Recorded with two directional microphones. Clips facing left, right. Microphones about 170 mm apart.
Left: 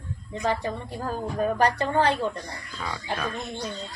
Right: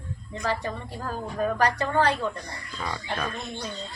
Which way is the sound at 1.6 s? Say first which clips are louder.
Left 1 dB; 25° left (ahead or behind).